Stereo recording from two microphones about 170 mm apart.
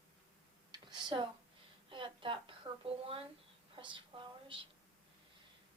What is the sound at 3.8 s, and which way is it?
Speech, 30° right (ahead or behind).